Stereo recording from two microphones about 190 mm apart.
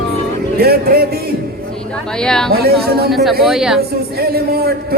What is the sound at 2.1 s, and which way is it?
Speech, 5° left (ahead or behind).